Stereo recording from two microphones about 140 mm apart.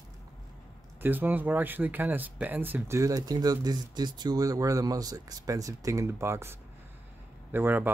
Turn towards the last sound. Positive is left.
turn(degrees=-15)  # may be behind; listen again after turning